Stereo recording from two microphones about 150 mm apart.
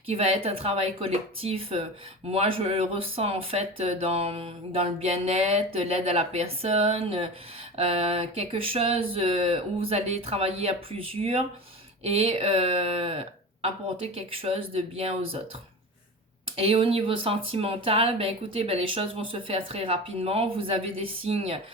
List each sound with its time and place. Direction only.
0.1 s speech: 45° right (ahead or behind)
16.6 s speech: 40° right (ahead or behind)